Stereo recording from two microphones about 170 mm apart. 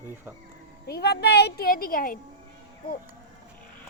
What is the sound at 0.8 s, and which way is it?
A child's voice, 75° left (ahead or behind).